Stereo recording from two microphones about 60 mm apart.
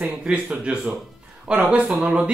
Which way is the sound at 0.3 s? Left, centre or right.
Right.